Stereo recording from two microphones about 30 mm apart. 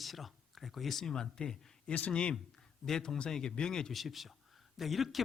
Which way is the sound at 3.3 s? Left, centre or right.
Centre.